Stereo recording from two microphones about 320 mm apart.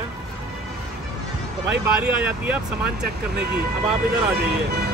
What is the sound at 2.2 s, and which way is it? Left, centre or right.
Speech, centre.